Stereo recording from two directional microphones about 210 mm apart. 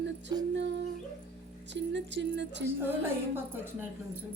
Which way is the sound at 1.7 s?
55° right (ahead or behind).